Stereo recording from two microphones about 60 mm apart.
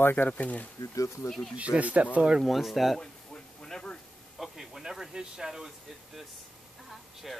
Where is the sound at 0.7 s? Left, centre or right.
Left.